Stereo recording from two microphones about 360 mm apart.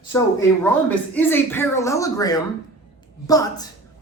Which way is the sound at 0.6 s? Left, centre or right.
Centre.